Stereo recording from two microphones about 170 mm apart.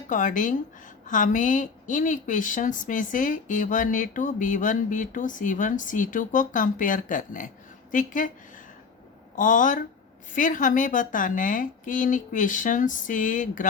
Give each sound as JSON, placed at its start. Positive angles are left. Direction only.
{"t": 0.1, "sound": "a woman's voice", "side_deg": 50}